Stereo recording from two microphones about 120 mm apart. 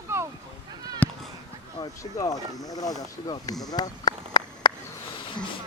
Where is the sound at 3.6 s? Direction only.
35° left (ahead or behind).